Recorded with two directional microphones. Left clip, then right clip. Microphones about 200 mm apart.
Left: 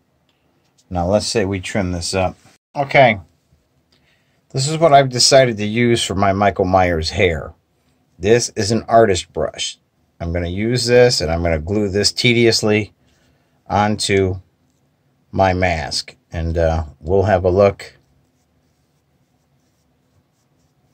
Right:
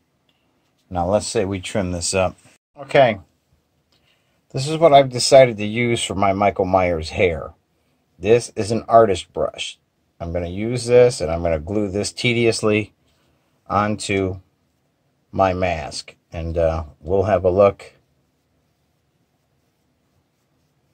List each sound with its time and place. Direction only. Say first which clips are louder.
0.8 s speech: left 2 dB; 10° right (ahead or behind); by 2.3 s 35° right (ahead or behind)
2.7 s speech: left 3 dB; 20° right (ahead or behind)
4.5 s speech: left 1 dB; 15° right (ahead or behind)
15.6 s speech: left 4 dB; centre (ahead or behind)